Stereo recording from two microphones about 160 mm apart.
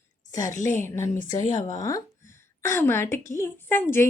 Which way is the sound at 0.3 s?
20° left (ahead or behind).